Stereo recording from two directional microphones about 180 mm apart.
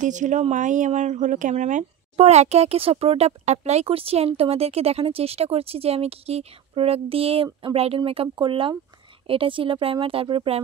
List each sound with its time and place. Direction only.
0.0 s a woman's voice: 45° right (ahead or behind)